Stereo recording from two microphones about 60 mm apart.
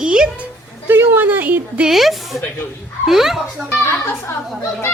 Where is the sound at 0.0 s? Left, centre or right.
Centre.